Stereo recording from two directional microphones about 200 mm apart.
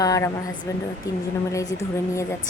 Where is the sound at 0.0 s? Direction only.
15° left (ahead or behind).